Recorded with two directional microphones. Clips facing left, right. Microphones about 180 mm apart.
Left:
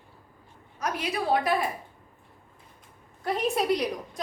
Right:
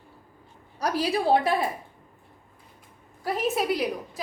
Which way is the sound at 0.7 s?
35° right (ahead or behind).